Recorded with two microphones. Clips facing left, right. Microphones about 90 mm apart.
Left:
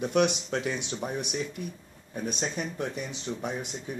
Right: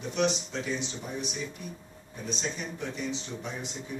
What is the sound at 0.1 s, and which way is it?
Speech, 60° left (ahead or behind).